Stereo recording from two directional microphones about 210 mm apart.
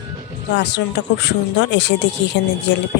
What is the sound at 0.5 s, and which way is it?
Speech, 55° left (ahead or behind).